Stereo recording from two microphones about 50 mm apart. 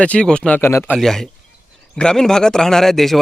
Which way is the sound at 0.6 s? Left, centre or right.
Left.